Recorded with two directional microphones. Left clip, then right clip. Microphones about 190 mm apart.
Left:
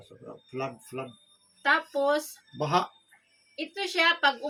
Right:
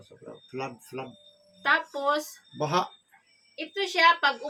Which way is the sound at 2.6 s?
10° left (ahead or behind).